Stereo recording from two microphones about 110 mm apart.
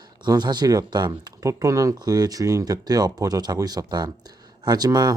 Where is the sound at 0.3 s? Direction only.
40° right (ahead or behind).